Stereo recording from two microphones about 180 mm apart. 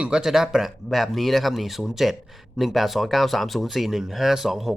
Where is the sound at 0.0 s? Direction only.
5° right (ahead or behind).